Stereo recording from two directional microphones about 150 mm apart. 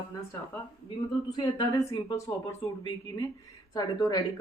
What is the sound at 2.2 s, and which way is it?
Speech, 20° left (ahead or behind).